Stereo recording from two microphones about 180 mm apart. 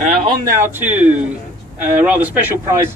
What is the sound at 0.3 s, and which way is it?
Speech, 15° right (ahead or behind).